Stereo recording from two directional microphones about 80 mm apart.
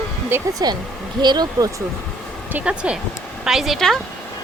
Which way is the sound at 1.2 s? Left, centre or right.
Right.